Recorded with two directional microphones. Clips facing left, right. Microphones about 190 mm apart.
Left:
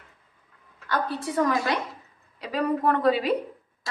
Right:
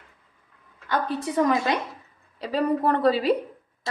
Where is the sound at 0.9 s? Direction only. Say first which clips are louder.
Right 2 dB; 20° right (ahead or behind).